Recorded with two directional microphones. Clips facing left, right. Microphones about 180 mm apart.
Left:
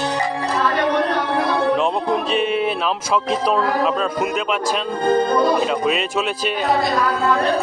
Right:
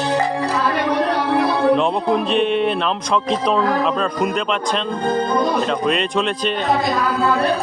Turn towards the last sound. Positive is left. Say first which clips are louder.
# right 2 dB
turn(degrees=5)  # may be behind; listen again after turning